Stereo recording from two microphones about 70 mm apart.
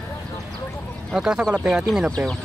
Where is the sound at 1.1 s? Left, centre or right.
Centre.